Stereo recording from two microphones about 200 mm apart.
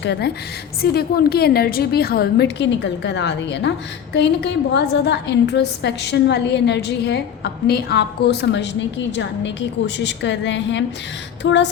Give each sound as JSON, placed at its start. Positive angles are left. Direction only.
{"t": 0.0, "sound": "a woman's voice", "side_deg": 55}